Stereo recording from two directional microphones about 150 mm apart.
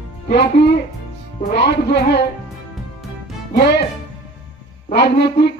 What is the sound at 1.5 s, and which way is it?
Speech, 90° left.